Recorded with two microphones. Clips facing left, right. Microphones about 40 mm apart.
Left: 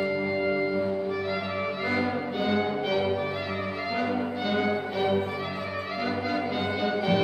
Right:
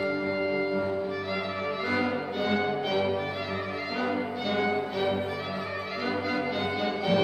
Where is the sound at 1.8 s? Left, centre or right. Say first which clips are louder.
Even; centre.